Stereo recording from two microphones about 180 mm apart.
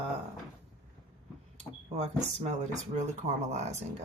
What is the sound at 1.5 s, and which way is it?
Speech, 40° right (ahead or behind).